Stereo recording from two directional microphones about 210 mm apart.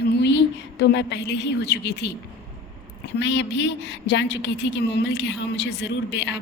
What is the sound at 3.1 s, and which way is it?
A woman's voice, 55° left (ahead or behind).